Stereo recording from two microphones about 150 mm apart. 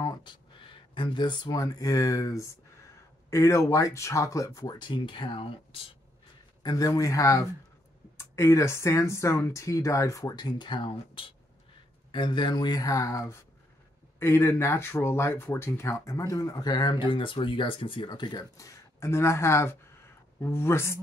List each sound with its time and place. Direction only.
0.0 s speech: 30° left (ahead or behind)
6.6 s speech: 25° left (ahead or behind)